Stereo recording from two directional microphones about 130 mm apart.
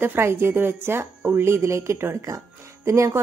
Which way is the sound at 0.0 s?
15° right (ahead or behind).